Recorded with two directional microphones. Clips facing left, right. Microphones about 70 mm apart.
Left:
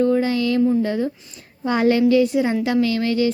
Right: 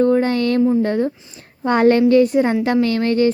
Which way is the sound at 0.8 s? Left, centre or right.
Right.